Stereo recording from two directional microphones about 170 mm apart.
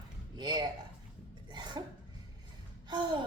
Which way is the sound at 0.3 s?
25° right (ahead or behind).